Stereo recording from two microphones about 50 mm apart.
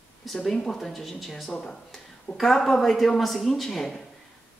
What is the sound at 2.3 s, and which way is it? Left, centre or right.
Speech, centre.